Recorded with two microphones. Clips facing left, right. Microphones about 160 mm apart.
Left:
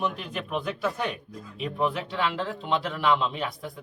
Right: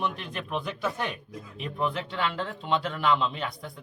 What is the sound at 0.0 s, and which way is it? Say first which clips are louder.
Speech: left 2 dB; 5° left (ahead or behind).